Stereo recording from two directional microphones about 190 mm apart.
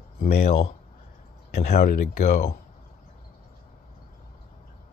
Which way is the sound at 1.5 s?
55° left (ahead or behind).